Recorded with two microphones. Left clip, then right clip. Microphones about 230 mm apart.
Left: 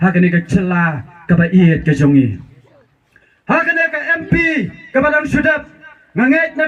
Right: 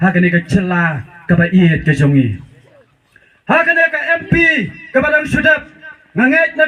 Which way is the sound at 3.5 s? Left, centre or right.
Right.